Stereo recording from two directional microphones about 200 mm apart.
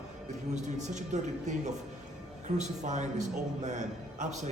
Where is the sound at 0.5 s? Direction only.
35° right (ahead or behind).